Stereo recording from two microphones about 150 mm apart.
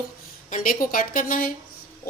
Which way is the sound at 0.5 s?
65° left (ahead or behind).